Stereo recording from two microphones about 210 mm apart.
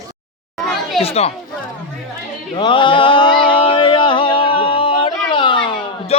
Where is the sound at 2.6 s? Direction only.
25° left (ahead or behind).